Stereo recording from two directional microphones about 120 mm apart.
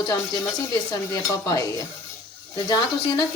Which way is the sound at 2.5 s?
35° left (ahead or behind).